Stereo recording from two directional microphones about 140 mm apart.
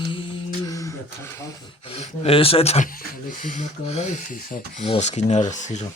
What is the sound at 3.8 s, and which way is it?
Speech, 55° left (ahead or behind).